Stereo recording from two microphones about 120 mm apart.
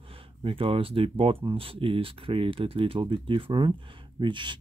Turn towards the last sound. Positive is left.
turn(degrees=-40)  # may be behind; listen again after turning